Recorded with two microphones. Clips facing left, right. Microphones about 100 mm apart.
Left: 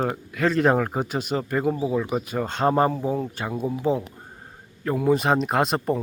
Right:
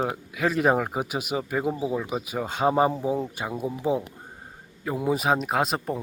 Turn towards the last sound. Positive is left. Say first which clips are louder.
# left 3 dB
turn(degrees=0)  # may be behind; listen again after turning